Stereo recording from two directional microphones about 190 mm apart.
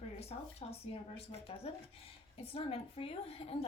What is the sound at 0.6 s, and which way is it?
A woman's voice, 30° left (ahead or behind).